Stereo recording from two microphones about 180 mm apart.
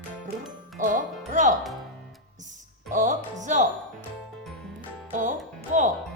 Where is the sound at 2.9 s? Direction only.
45° right (ahead or behind).